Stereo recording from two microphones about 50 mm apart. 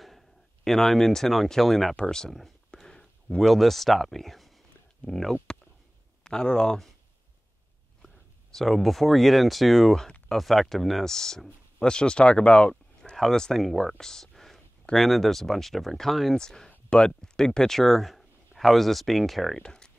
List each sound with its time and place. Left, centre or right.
0.0 s speech: centre
2.7 s a sound: centre
3.4 s speech: centre
8.0 s speech: centre; by 13.1 s left
13.1 s speech: centre
19.6 s a sound: centre